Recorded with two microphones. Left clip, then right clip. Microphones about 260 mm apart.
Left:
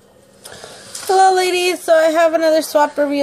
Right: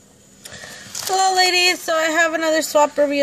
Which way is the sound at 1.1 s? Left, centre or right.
Right.